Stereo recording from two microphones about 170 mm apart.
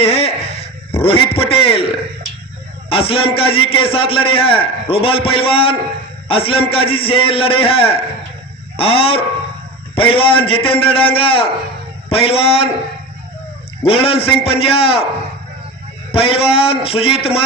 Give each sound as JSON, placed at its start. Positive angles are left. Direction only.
{"t": 0.0, "sound": "a sound", "side_deg": 35}
{"t": 2.9, "sound": "a man's voice", "side_deg": 35}
{"t": 13.8, "sound": "a man's voice", "side_deg": 35}
{"t": 16.1, "sound": "a man's voice", "side_deg": 35}